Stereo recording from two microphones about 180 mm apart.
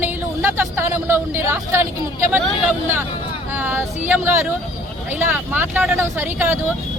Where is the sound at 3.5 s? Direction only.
10° right (ahead or behind).